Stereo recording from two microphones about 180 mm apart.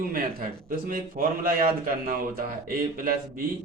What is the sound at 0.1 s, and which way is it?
A man's voice, 55° right (ahead or behind).